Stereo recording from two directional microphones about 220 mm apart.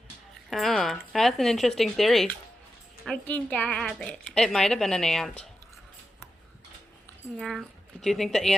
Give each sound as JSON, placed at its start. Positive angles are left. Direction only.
{"t": 0.5, "sound": "a woman's voice", "side_deg": 0}
{"t": 7.3, "sound": "a woman's voice", "side_deg": 0}